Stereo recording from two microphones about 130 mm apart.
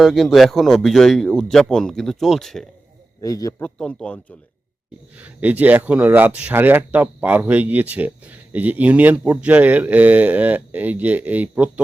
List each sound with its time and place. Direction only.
0.0 s speech: centre (ahead or behind)
3.2 s a man's voice: 25° left (ahead or behind)
3.6 s speech: 5° left (ahead or behind)
5.1 s speech: 10° right (ahead or behind)